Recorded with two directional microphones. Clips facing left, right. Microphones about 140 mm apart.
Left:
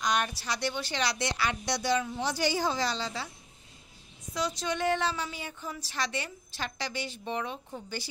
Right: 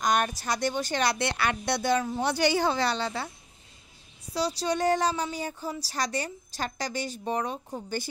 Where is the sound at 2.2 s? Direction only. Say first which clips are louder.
Right 4 dB; 65° right (ahead or behind).